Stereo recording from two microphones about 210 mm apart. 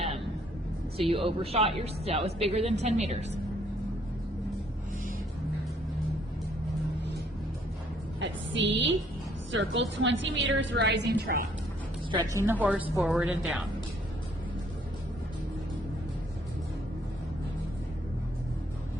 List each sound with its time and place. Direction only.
0.9 s a woman's voice: 25° right (ahead or behind)
8.2 s a woman's voice: 60° right (ahead or behind)
12.1 s a woman's voice: 20° right (ahead or behind)
12.5 s a woman's voice: 5° right (ahead or behind)